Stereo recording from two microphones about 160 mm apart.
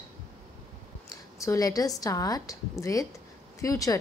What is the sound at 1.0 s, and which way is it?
A woman's voice, 20° left (ahead or behind).